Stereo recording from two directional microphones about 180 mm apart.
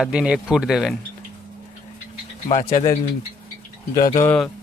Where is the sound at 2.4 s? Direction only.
35° left (ahead or behind).